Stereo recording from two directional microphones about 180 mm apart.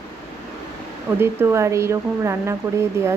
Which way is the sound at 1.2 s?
15° right (ahead or behind).